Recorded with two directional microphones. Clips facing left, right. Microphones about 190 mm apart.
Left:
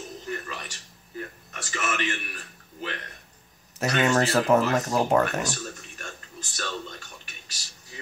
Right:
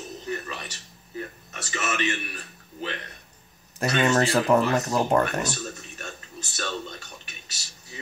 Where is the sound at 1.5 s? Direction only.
20° right (ahead or behind).